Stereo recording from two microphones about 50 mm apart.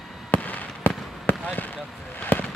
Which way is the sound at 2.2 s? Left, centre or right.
Left.